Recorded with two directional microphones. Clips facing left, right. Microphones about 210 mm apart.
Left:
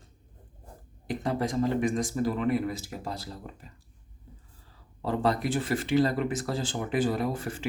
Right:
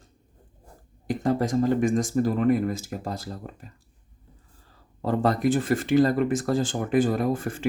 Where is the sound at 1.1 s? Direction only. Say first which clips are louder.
Right 5 dB; 45° right (ahead or behind).